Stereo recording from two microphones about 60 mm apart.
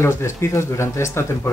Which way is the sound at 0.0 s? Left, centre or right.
Left.